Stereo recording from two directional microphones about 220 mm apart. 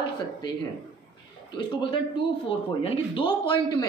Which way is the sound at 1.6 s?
20° left (ahead or behind).